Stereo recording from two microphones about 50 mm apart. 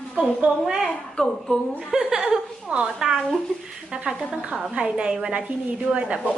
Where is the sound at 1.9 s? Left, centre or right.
Centre.